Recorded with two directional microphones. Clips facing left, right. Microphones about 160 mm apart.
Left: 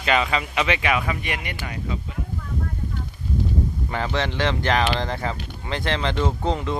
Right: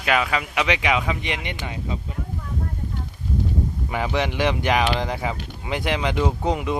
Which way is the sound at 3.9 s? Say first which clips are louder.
Right 3 dB; 10° right (ahead or behind).